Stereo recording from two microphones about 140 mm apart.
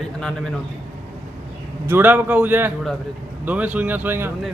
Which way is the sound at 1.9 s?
15° right (ahead or behind).